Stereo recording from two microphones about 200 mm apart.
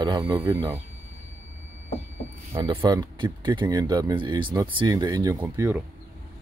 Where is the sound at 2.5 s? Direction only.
15° right (ahead or behind).